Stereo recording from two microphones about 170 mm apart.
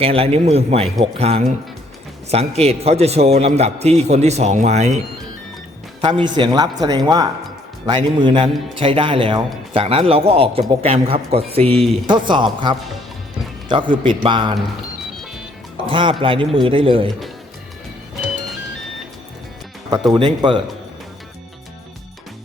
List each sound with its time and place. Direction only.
0.0 s speech: 35° right (ahead or behind)
6.0 s a man's voice: 30° right (ahead or behind)
15.9 s a man's voice: 30° right (ahead or behind)
20.1 s a man's voice: 30° right (ahead or behind)